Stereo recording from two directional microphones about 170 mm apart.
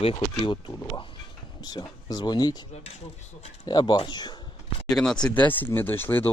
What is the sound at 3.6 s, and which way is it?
Speech, 25° left (ahead or behind).